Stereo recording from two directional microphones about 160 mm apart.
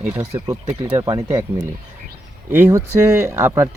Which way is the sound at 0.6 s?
35° right (ahead or behind).